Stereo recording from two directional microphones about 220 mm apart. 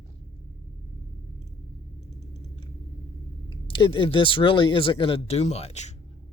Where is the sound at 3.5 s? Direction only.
25° left (ahead or behind).